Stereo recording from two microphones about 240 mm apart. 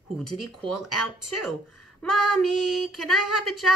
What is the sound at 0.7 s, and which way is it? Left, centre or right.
Speech, left.